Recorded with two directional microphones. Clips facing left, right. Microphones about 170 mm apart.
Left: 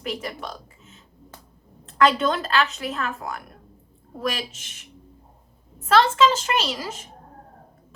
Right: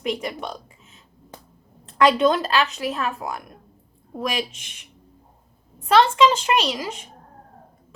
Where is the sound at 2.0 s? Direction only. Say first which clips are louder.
Right 5 dB; 20° right (ahead or behind).